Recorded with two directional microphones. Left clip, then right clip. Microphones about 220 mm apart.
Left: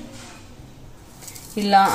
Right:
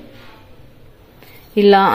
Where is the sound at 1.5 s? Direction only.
30° right (ahead or behind).